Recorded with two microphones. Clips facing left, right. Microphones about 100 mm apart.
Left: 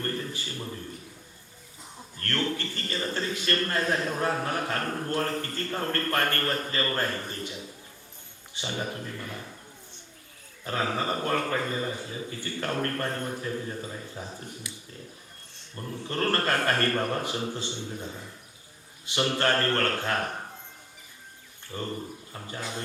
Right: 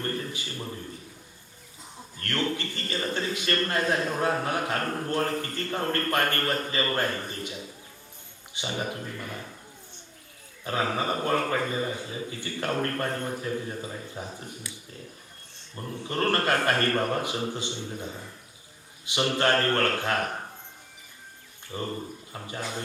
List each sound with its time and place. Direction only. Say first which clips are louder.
0.0 s a man's voice: right 1 dB; 15° right (ahead or behind)
2.2 s a man's voice: right 1 dB; 15° right (ahead or behind)
8.5 s a man's voice: right 1 dB; 15° right (ahead or behind)
10.6 s a man's voice: right 1 dB; 15° right (ahead or behind)
15.7 s a man's voice: right 1 dB; 15° right (ahead or behind)
19.4 s a man's voice: right 2 dB; 15° right (ahead or behind)
21.7 s a man's voice: right 1 dB; 15° right (ahead or behind)